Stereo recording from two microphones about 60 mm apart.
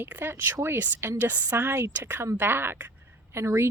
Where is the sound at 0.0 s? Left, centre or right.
Right.